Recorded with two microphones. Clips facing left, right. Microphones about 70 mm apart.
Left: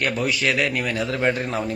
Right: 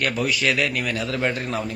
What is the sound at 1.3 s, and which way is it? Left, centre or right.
Speech, centre.